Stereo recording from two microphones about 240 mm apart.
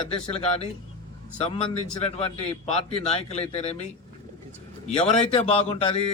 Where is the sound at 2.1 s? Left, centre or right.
Left.